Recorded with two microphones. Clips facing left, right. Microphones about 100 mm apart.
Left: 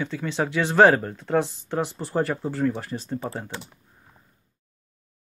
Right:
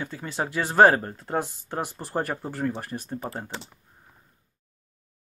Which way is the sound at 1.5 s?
45° right (ahead or behind).